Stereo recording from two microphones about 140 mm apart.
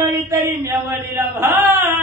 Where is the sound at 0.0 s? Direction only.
20° right (ahead or behind).